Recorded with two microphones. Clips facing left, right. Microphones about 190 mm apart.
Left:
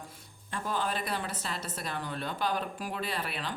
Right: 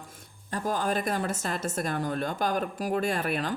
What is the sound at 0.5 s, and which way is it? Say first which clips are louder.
Speech: right 5 dB; 45° right (ahead or behind).